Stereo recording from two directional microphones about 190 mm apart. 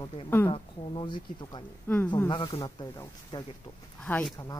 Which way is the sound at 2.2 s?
20° left (ahead or behind).